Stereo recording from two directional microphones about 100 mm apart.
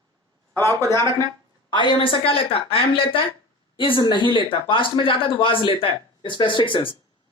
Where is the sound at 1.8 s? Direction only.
55° left (ahead or behind).